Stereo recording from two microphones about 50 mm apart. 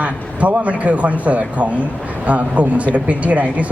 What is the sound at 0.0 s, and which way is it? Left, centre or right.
Speech, right.